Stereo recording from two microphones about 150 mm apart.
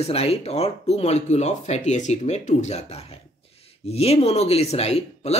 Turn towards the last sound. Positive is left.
turn(degrees=45)  # may be behind; listen again after turning